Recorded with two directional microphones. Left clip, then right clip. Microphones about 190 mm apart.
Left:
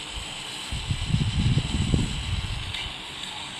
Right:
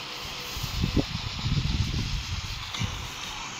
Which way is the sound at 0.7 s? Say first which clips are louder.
Right 2 dB; 90° left.